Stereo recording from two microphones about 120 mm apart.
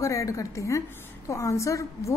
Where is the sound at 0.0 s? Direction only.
25° left (ahead or behind).